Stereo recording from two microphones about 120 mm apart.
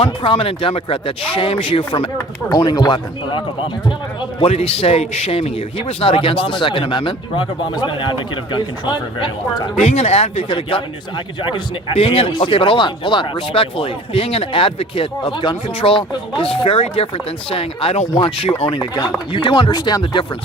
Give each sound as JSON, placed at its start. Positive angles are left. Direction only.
{"t": 0.0, "sound": "speech", "side_deg": 50}
{"t": 2.6, "sound": "speech", "side_deg": 35}
{"t": 9.8, "sound": "speech", "side_deg": 65}
{"t": 10.5, "sound": "speech", "side_deg": 45}